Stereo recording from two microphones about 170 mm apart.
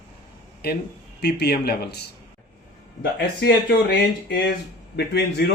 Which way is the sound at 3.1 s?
70° left (ahead or behind).